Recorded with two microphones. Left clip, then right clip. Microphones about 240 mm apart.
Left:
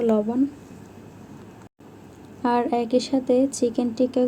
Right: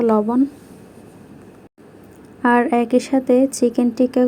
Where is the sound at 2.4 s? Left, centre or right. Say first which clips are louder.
Right 6 dB; centre.